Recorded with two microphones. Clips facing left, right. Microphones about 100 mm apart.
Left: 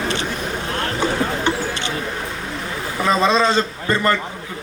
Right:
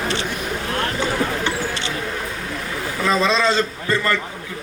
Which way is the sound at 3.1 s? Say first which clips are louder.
Left 2 dB; 25° left (ahead or behind).